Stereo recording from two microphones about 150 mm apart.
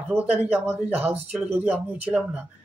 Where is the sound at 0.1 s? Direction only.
10° right (ahead or behind).